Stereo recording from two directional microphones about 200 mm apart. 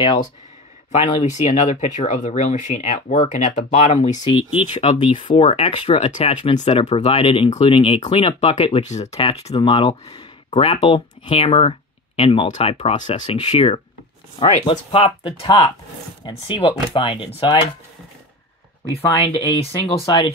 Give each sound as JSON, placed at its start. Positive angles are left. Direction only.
{"t": 0.0, "sound": "speech", "side_deg": 25}
{"t": 18.9, "sound": "speech", "side_deg": 30}